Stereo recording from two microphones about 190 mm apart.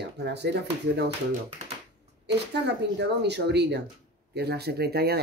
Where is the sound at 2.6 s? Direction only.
65° right (ahead or behind).